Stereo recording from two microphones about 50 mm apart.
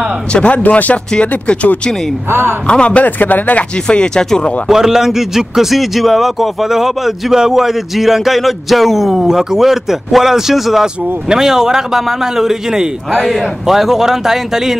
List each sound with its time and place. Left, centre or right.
0.3 s speech: left
0.6 s speech: left
3.2 s speech: left
3.8 s speech: centre
4.6 s a man's voice: centre